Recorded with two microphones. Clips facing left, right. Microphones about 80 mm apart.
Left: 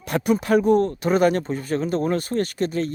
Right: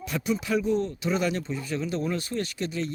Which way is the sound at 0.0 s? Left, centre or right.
Left.